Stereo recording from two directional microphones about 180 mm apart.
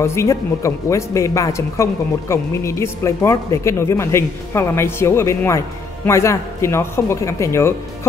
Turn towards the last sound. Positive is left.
turn(degrees=15)  # may be behind; listen again after turning